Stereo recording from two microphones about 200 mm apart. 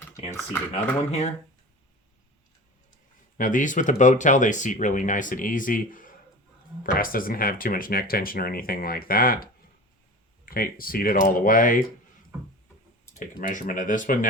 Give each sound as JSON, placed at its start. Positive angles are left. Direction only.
{"t": 0.7, "sound": "speech", "side_deg": 30}
{"t": 3.3, "sound": "speech", "side_deg": 40}
{"t": 13.1, "sound": "speech", "side_deg": 40}